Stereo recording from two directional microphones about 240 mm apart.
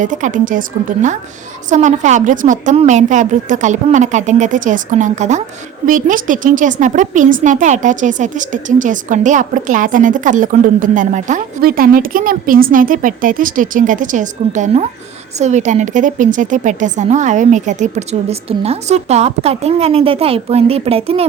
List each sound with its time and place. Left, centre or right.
0.0 s a woman's voice: right
1.7 s a woman's voice: right